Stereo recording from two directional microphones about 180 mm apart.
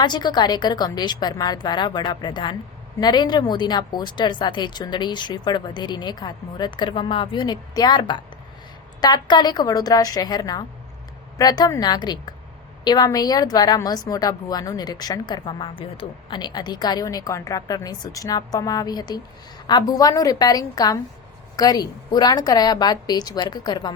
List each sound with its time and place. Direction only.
0.0 s a woman's voice: 25° left (ahead or behind)